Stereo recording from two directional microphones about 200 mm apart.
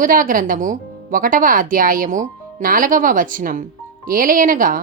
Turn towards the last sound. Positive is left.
turn(degrees=-45)  # may be behind; listen again after turning